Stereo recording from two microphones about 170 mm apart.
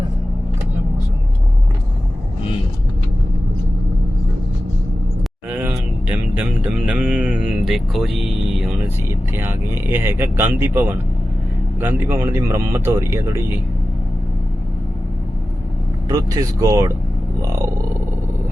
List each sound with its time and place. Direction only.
5.5 s a sound: 10° right (ahead or behind)
9.0 s speech: 15° right (ahead or behind)
16.0 s speech: 20° right (ahead or behind)